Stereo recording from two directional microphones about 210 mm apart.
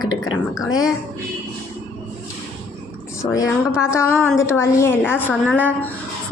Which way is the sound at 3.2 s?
15° left (ahead or behind).